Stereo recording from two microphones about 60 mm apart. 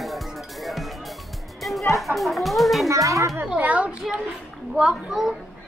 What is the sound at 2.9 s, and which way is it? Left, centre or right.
Speech, right.